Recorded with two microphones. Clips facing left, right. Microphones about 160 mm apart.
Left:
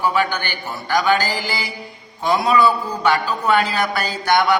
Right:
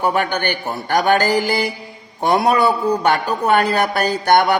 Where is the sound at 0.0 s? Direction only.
55° right (ahead or behind).